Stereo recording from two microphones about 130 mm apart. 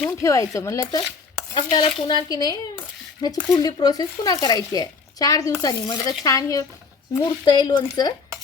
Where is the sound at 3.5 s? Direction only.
30° left (ahead or behind).